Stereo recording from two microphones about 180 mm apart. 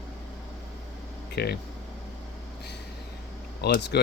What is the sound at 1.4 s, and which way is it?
Speech, 65° left (ahead or behind).